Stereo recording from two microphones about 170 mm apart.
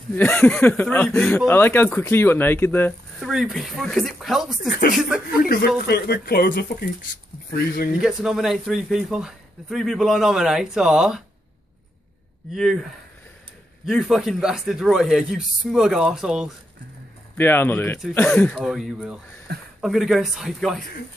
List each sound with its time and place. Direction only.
0.1 s speech: 10° left (ahead or behind)
3.2 s a man's voice: centre (ahead or behind)
4.6 s speech: 60° left (ahead or behind)
8.0 s a man's voice: 5° right (ahead or behind)
12.5 s a man's voice: centre (ahead or behind)
13.8 s a man's voice: centre (ahead or behind)
17.4 s a man's voice: 10° left (ahead or behind)